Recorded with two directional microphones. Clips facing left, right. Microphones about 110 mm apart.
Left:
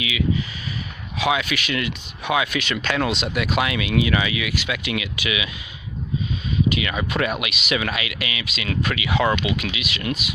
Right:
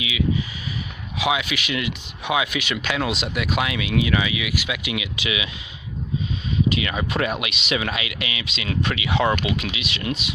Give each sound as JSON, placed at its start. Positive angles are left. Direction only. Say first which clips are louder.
{"t": 0.0, "sound": "speech", "louder": "even", "side_deg": -15}
{"t": 6.7, "sound": "speech", "louder": "even", "side_deg": -30}